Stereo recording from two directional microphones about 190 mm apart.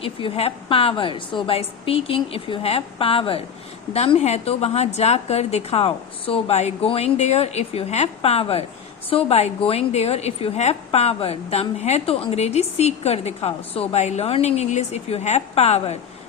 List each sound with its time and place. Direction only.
0.0 s a woman's voice: 30° left (ahead or behind)